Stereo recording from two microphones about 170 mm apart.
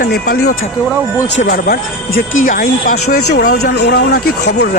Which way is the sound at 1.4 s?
55° left (ahead or behind).